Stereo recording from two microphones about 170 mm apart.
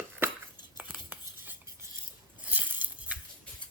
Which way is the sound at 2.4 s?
10° right (ahead or behind).